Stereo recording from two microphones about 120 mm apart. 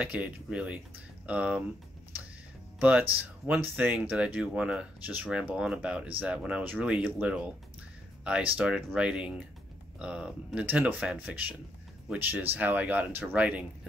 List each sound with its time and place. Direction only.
0.0 s speech: 10° right (ahead or behind)
2.8 s speech: 15° right (ahead or behind)